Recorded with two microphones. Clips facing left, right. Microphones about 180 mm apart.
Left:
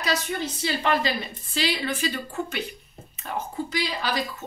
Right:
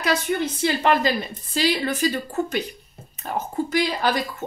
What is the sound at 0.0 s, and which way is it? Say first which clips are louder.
A woman's voice: right 5 dB; 55° right (ahead or behind).